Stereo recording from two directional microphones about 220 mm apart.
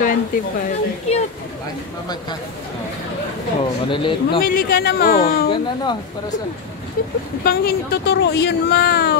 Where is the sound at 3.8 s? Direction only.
20° left (ahead or behind).